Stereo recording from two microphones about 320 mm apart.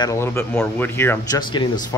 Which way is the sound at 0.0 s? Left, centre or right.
Centre.